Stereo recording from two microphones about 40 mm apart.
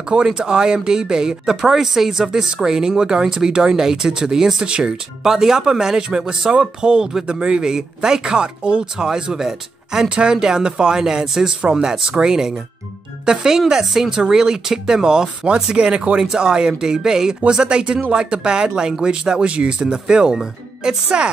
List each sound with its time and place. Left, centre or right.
0.1 s speech: right
4.6 s speech: right
5.2 s speech: centre
10.0 s speech: right